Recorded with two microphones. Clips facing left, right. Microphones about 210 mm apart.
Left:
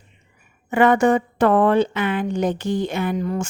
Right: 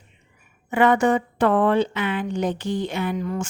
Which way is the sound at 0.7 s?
45° left (ahead or behind).